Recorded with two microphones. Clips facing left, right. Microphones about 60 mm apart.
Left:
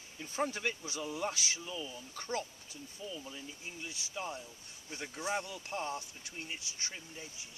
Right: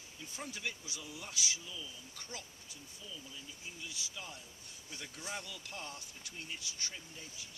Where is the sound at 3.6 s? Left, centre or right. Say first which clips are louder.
Right 1 dB; left.